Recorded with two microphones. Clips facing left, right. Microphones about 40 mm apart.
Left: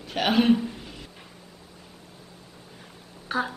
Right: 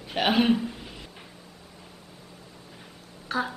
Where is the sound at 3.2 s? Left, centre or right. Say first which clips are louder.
Left 1 dB; centre.